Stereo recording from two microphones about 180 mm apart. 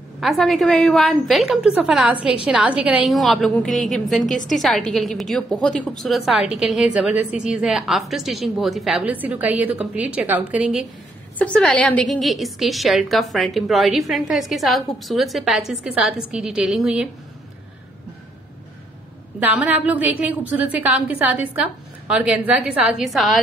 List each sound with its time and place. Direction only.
0.2 s a woman's voice: centre (ahead or behind)
11.3 s a woman's voice: 5° left (ahead or behind)
19.4 s a woman's voice: 10° right (ahead or behind)